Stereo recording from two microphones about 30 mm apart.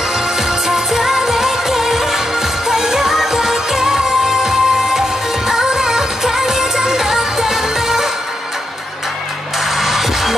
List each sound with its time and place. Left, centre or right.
0.5 s music of asia: centre
2.7 s music: centre
9.8 s music: centre